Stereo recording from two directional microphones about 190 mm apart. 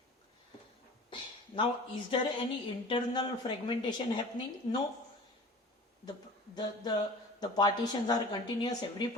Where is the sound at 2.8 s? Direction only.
25° left (ahead or behind).